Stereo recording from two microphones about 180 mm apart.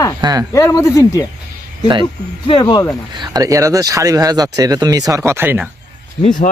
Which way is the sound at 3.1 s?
25° right (ahead or behind).